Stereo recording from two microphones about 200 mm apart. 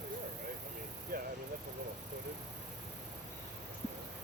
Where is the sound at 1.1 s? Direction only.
45° right (ahead or behind).